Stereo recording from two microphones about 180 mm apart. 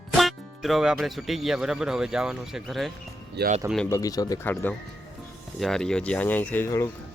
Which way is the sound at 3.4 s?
65° right (ahead or behind).